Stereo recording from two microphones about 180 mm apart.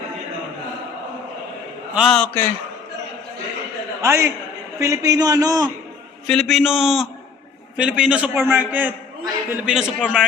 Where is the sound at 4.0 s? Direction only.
15° right (ahead or behind).